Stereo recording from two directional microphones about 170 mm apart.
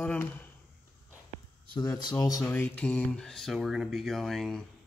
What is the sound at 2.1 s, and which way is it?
Speech, 20° left (ahead or behind).